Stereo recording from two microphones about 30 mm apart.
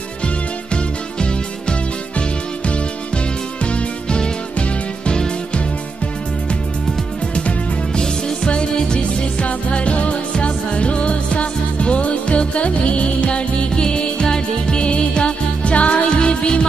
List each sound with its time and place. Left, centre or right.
1.2 s music: left
4.6 s music: left
7.9 s music: left
9.0 s music: left
13.7 s music: left
14.9 s music: left
16.1 s music: left